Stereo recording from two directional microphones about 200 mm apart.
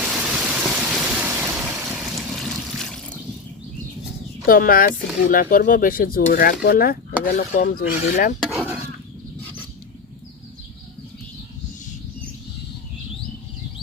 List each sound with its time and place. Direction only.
0.0 s vehicle: 5° right (ahead or behind)
4.4 s speech: 45° left (ahead or behind)
8.4 s cutlery: 5° right (ahead or behind)